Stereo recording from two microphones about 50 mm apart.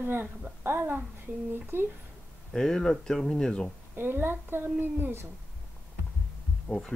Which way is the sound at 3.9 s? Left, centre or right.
Right.